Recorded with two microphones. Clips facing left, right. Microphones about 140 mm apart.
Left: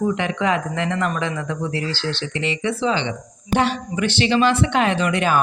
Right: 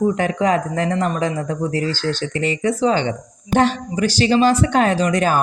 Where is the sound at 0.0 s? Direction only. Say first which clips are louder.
Right 3 dB; 40° right (ahead or behind).